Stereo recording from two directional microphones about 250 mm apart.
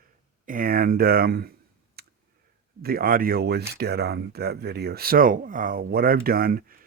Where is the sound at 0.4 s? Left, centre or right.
Right.